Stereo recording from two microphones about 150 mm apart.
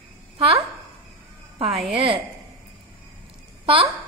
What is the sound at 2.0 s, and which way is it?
Speech, 35° right (ahead or behind).